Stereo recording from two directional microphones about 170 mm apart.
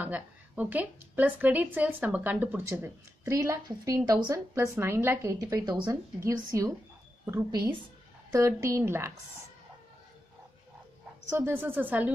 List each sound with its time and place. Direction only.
0.0 s a woman's voice: 10° right (ahead or behind)
11.3 s a woman's voice: 15° right (ahead or behind)